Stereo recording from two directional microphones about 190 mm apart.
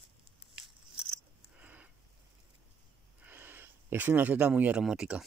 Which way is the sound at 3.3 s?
10° right (ahead or behind).